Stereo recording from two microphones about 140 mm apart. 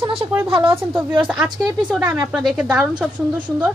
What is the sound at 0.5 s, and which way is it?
Speech, 40° right (ahead or behind).